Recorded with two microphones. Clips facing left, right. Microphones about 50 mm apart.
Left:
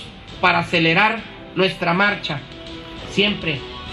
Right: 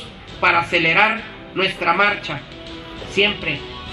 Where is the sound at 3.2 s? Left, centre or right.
Right.